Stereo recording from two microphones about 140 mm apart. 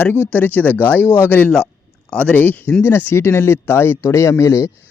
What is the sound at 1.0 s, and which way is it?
Speech, 15° right (ahead or behind).